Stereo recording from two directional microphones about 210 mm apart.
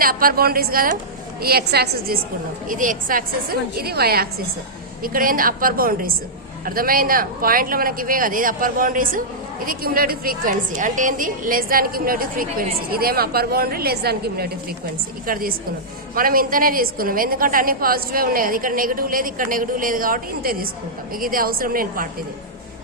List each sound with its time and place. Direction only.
0.0 s a woman's voice: 45° right (ahead or behind)
2.6 s a woman's voice: 40° right (ahead or behind)